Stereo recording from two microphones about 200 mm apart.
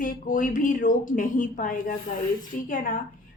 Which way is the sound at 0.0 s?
40° left (ahead or behind).